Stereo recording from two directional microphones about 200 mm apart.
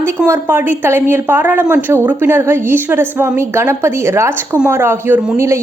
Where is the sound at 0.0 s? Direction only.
10° right (ahead or behind).